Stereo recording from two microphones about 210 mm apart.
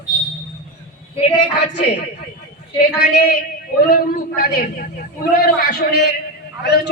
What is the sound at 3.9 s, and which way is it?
A woman's voice, 45° left (ahead or behind).